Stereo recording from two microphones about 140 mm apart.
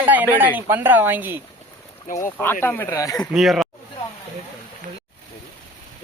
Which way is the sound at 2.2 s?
15° left (ahead or behind).